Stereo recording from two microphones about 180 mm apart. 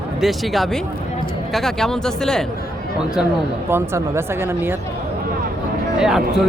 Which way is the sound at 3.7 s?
15° right (ahead or behind).